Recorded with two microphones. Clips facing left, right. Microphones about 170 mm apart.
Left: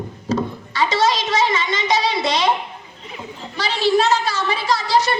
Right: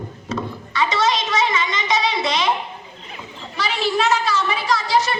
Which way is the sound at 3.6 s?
35° left (ahead or behind).